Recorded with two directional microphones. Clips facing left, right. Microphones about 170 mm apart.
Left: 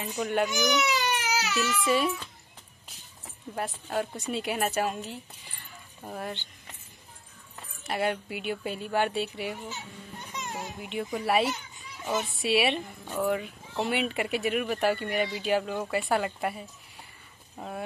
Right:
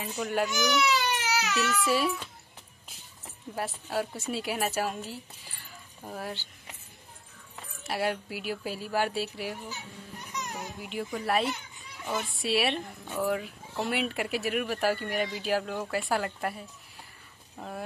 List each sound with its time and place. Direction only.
0.2 s speech: centre (ahead or behind)
0.5 s speech: 20° left (ahead or behind)
1.9 s speech: centre (ahead or behind)
3.5 s speech: centre (ahead or behind)
7.8 s speech: centre (ahead or behind)
9.7 s children playing: 25° left (ahead or behind)
10.8 s speech: centre (ahead or behind)
12.0 s speech: 25° left (ahead or behind)
12.3 s speech: centre (ahead or behind)